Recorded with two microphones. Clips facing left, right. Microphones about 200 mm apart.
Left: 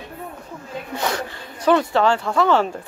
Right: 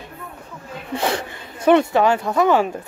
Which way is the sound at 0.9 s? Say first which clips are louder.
Right 3 dB; 30° right (ahead or behind).